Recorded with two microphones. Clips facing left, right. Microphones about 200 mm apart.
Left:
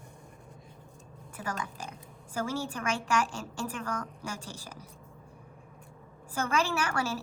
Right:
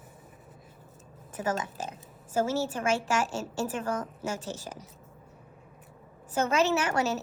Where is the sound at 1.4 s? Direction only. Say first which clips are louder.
Right 6 dB; 25° right (ahead or behind).